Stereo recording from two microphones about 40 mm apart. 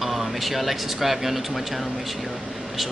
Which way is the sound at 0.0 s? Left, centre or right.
Centre.